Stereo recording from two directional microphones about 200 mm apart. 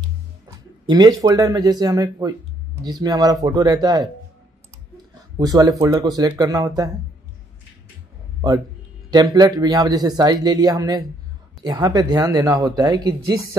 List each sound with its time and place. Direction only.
0.8 s speech: 20° right (ahead or behind)
5.4 s speech: 20° right (ahead or behind)
9.1 s speech: 20° right (ahead or behind)